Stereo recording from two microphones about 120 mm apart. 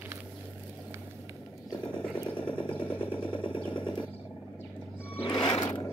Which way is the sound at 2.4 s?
45° left (ahead or behind).